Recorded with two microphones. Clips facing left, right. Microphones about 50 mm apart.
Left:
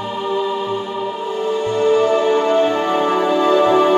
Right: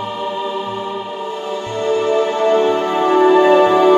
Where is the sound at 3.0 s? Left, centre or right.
Right.